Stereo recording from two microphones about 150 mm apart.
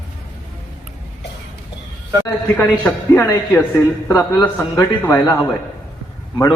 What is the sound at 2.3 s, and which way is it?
A man's voice, 15° left (ahead or behind).